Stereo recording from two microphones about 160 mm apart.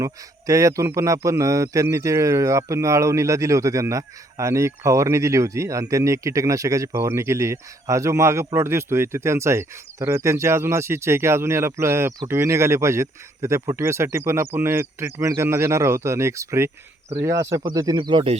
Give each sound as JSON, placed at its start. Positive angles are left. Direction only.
{"t": 0.0, "sound": "a man's voice", "side_deg": -20}